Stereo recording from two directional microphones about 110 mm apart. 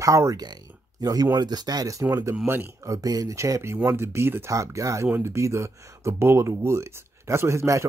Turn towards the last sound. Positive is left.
turn(degrees=-25)  # may be behind; listen again after turning